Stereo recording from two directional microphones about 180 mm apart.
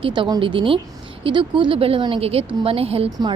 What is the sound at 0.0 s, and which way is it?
A woman's voice, 25° right (ahead or behind).